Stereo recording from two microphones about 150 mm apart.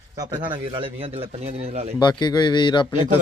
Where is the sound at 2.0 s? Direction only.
30° left (ahead or behind).